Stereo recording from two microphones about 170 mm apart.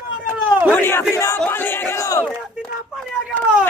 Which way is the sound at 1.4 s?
10° left (ahead or behind).